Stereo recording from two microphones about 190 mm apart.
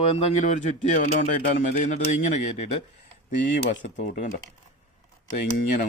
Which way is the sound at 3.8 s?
40° left (ahead or behind).